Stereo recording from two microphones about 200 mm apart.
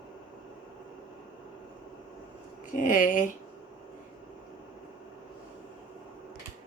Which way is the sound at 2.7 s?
40° left (ahead or behind).